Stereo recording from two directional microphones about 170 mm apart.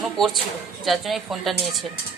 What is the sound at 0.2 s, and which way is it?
A woman's voice, centre (ahead or behind).